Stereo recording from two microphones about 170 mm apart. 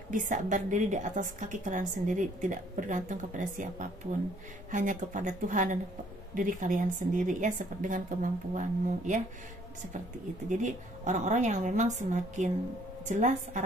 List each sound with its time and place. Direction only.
0.1 s a woman's voice: 50° right (ahead or behind)
10.6 s a woman's voice: 45° right (ahead or behind)